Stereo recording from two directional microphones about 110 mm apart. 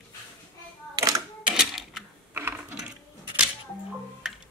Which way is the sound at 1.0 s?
30° right (ahead or behind).